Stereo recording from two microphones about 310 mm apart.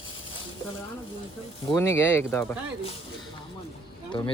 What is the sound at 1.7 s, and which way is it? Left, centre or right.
Speech, centre.